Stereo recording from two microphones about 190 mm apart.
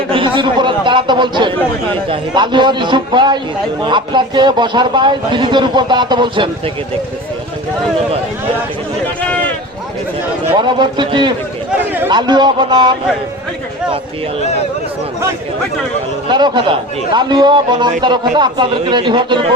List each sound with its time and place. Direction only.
0.1 s a man's voice: 25° right (ahead or behind)
10.5 s a man's voice: 25° right (ahead or behind)
16.3 s a man's voice: 25° right (ahead or behind)